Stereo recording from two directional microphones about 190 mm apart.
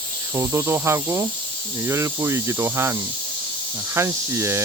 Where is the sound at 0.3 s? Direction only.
15° right (ahead or behind).